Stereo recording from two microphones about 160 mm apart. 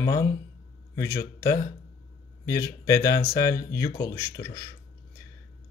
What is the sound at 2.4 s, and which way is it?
Speech, 20° left (ahead or behind).